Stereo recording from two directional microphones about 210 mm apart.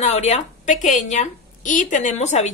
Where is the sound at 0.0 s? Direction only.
30° left (ahead or behind).